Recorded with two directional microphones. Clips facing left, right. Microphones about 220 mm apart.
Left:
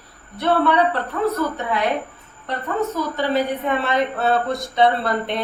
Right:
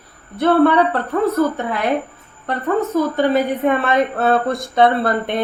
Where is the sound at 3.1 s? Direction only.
50° right (ahead or behind).